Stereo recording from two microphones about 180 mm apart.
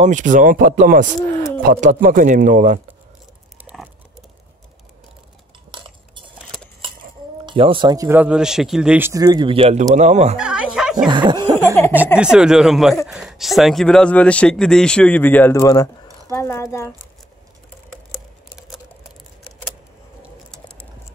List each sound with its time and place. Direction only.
0.0 s a man's voice: 45° right (ahead or behind)
3.6 s a sound: 10° right (ahead or behind)
5.7 s cutlery: 25° right (ahead or behind)
7.4 s a man's voice: 30° right (ahead or behind)
10.3 s a sound: 5° right (ahead or behind)
11.1 s snicker: 25° right (ahead or behind)
12.2 s a man's voice: 5° right (ahead or behind); by 16.9 s 15° left (ahead or behind)
18.1 s computer keyboard: centre (ahead or behind)
20.5 s typing: 5° left (ahead or behind)